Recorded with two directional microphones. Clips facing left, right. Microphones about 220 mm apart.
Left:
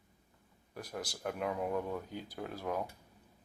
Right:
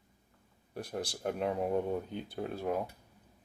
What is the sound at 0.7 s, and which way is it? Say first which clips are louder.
Speech: right 4 dB; 30° right (ahead or behind).